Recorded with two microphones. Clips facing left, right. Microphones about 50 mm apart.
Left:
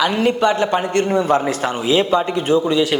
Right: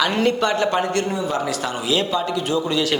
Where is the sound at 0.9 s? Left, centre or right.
Left.